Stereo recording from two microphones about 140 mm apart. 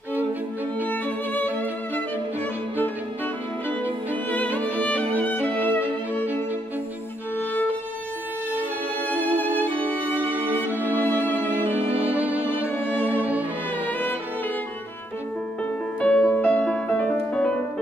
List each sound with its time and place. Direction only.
0.8 s music: 10° left (ahead or behind)
4.1 s music: 10° left (ahead or behind)
5.7 s violin: 15° left (ahead or behind)
9.1 s music: 10° left (ahead or behind)
10.3 s music: 15° right (ahead or behind)
10.8 s music: 15° left (ahead or behind)
12.0 s music: 10° right (ahead or behind)
12.6 s music: 15° left (ahead or behind)
13.1 s music: 10° right (ahead or behind)
16.0 s music: 5° left (ahead or behind)